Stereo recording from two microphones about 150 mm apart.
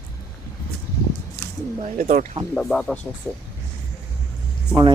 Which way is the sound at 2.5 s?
5° left (ahead or behind).